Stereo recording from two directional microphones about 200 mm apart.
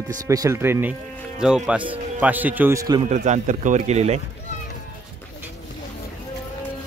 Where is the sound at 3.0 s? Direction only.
35° right (ahead or behind).